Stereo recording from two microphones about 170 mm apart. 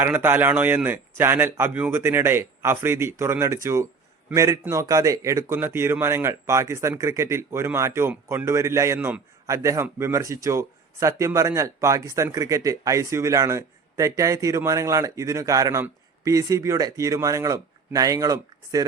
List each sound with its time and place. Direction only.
0.0 s speech: 10° right (ahead or behind)